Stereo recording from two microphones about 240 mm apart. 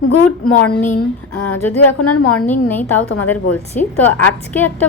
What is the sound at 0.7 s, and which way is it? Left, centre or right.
Speech, left.